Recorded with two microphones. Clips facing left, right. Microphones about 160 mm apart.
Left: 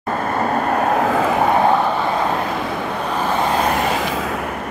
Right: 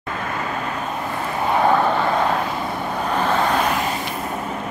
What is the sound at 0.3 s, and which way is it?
Vehicle, 50° left (ahead or behind).